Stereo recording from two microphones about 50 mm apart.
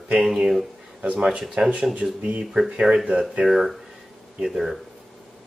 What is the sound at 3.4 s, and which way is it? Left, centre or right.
Speech, centre.